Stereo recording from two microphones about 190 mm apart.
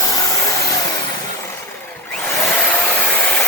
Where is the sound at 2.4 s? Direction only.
5° left (ahead or behind).